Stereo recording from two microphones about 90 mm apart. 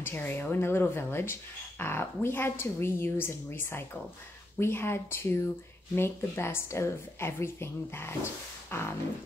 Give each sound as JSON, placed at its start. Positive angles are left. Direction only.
{"t": 0.0, "sound": "a woman's voice", "side_deg": 25}